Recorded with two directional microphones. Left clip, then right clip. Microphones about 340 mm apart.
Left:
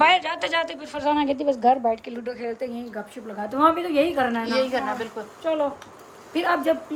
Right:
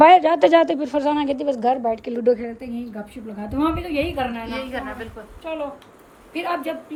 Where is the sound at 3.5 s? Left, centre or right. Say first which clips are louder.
Left 3 dB; centre.